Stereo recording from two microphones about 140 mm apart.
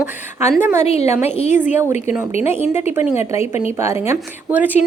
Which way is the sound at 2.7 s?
15° right (ahead or behind).